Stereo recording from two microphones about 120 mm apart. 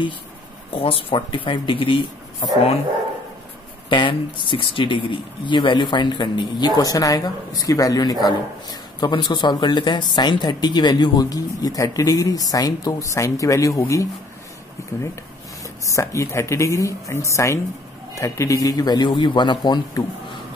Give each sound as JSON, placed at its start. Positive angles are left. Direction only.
{"t": 0.7, "sound": "speech", "side_deg": 50}
{"t": 3.9, "sound": "speech", "side_deg": 45}
{"t": 15.8, "sound": "a woman's voice", "side_deg": 25}